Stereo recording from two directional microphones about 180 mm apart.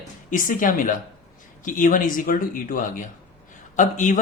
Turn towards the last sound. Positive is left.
turn(degrees=45)  # may be behind; listen again after turning